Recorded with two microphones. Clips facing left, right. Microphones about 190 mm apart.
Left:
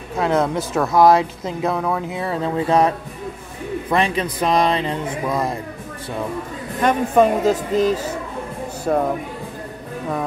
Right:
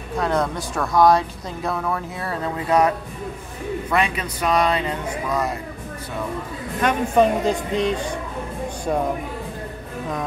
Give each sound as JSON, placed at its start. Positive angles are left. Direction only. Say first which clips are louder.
{"t": 0.2, "sound": "speech", "louder": "left 4 dB", "side_deg": 25}
{"t": 3.9, "sound": "speech", "louder": "left 4 dB", "side_deg": 30}
{"t": 6.8, "sound": "speech", "louder": "left 2 dB", "side_deg": 5}